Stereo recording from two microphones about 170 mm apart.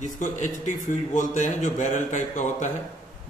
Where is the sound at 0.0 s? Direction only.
45° left (ahead or behind).